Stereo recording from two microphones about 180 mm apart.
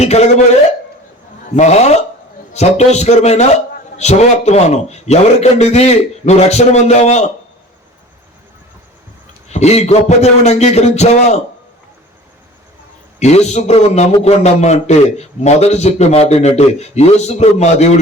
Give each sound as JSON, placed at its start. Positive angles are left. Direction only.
{"t": 0.0, "sound": "a man's voice", "side_deg": 35}
{"t": 1.5, "sound": "a man's voice", "side_deg": 40}
{"t": 9.5, "sound": "a man's voice", "side_deg": 40}
{"t": 13.1, "sound": "a man's voice", "side_deg": 40}